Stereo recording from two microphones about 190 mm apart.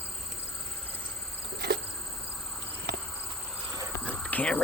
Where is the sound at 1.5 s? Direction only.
60° right (ahead or behind).